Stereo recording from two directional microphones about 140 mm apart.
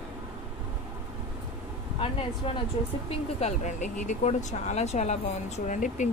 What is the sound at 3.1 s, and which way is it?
Speech, 55° left (ahead or behind).